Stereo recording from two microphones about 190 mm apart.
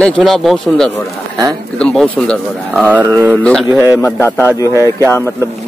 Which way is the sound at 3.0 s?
20° right (ahead or behind).